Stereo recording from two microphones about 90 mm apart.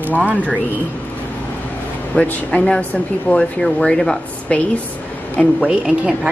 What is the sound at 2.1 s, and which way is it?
Speech, 15° left (ahead or behind).